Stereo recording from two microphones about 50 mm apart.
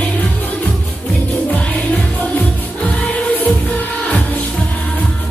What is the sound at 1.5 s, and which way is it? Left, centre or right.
Music, left.